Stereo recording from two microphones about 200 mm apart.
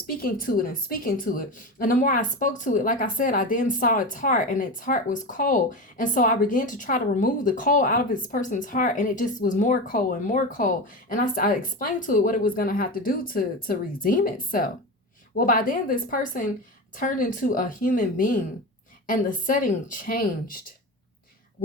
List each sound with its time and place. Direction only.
0.2 s a woman's voice: 45° left (ahead or behind)